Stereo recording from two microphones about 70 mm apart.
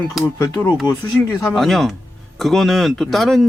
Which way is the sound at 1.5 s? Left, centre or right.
Centre.